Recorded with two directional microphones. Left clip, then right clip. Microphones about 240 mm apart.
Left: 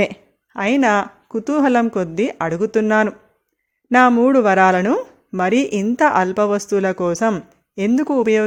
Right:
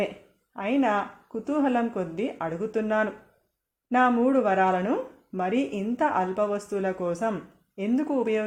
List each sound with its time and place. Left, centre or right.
0.5 s speech: left